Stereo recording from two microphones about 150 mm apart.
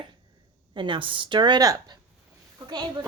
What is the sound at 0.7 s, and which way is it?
A woman's voice, 30° right (ahead or behind).